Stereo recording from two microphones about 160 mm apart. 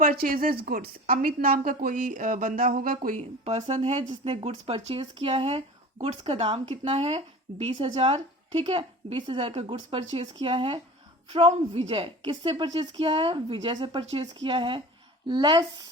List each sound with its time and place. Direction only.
0.0 s a woman's voice: 60° right (ahead or behind); by 15.9 s 30° right (ahead or behind)